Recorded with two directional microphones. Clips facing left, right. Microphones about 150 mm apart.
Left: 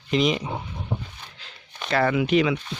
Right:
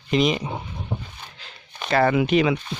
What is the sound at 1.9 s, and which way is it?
Speech, 40° right (ahead or behind).